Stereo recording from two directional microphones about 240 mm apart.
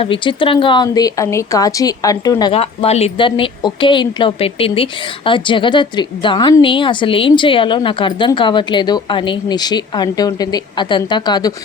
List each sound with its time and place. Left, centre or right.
0.0 s a woman's voice: left